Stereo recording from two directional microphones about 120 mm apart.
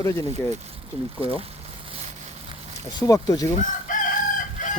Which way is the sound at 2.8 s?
35° left (ahead or behind).